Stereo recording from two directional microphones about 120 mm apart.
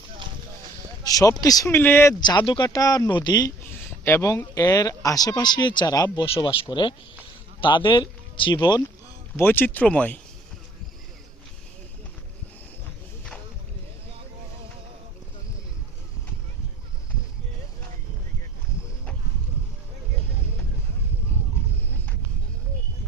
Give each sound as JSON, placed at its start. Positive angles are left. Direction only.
{"t": 1.0, "sound": "speech", "side_deg": 30}
{"t": 2.2, "sound": "speech", "side_deg": 45}
{"t": 2.6, "sound": "speech", "side_deg": 30}
{"t": 4.0, "sound": "speech", "side_deg": 25}
{"t": 6.2, "sound": "speech", "side_deg": 50}
{"t": 9.3, "sound": "speech", "side_deg": 15}